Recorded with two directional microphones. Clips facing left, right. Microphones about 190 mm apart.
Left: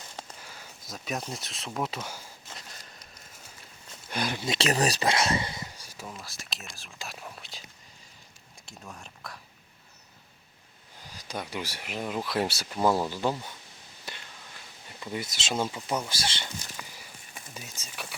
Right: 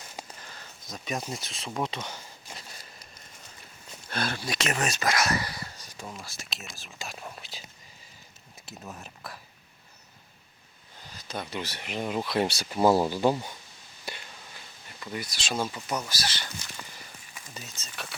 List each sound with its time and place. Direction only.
0.3 s speech: 10° left (ahead or behind)
4.1 s speech: 15° left (ahead or behind)
4.5 s speech: 35° left (ahead or behind); by 7.6 s centre (ahead or behind)
8.6 s speech: 5° right (ahead or behind)
11.0 s speech: 10° left (ahead or behind)
12.7 s speech: 10° right (ahead or behind)
15.0 s speech: 20° left (ahead or behind)
17.5 s speech: 10° left (ahead or behind)